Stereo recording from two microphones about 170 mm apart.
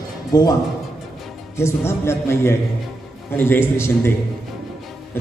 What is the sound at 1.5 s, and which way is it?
A man's voice, 15° left (ahead or behind).